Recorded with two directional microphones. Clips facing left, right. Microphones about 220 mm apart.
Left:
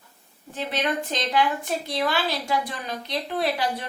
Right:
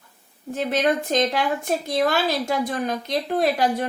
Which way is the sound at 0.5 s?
45° right (ahead or behind).